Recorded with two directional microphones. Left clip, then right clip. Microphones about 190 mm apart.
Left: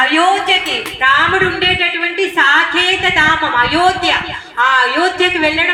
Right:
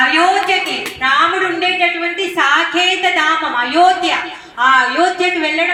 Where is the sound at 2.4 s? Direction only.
50° left (ahead or behind).